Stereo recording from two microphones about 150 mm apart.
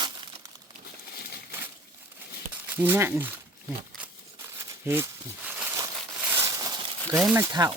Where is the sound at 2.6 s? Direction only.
15° right (ahead or behind).